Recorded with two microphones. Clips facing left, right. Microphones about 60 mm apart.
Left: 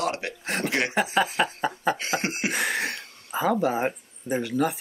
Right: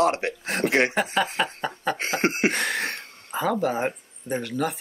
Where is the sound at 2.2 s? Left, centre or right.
Right.